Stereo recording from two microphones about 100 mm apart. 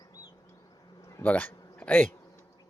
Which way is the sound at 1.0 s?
30° left (ahead or behind).